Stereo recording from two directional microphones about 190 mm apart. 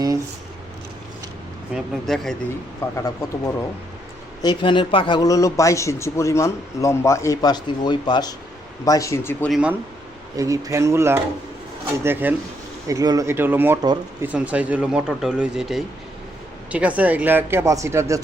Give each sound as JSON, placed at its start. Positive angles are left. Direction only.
{"t": 1.7, "sound": "speech", "side_deg": 0}
{"t": 2.9, "sound": "a man's voice", "side_deg": 15}
{"t": 9.5, "sound": "speech", "side_deg": -5}
{"t": 10.3, "sound": "speech", "side_deg": -15}